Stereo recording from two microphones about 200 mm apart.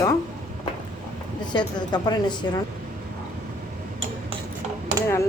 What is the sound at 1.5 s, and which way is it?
Speech, 20° left (ahead or behind).